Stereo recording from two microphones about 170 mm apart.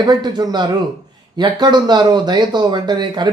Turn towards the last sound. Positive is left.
turn(degrees=-25)  # may be behind; listen again after turning